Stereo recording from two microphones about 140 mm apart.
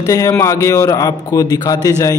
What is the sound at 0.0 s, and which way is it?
A man's voice, 20° left (ahead or behind).